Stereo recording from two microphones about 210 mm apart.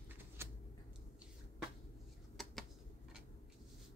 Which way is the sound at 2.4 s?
Centre (ahead or behind).